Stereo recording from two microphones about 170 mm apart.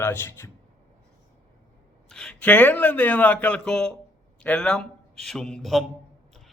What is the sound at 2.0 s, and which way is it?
A man's voice, 5° left (ahead or behind).